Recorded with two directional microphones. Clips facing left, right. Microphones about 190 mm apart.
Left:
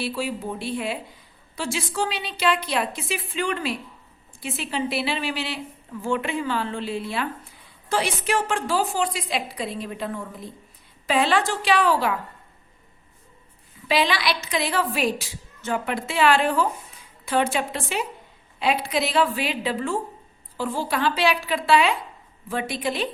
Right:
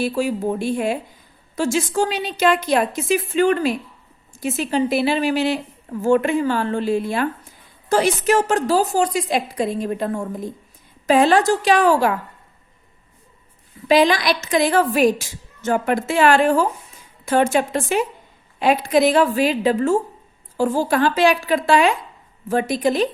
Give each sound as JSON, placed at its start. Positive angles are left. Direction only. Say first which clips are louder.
{"t": 0.0, "sound": "a woman's voice", "louder": "right 7 dB", "side_deg": -45}
{"t": 13.8, "sound": "a woman's voice", "louder": "right 7 dB", "side_deg": -45}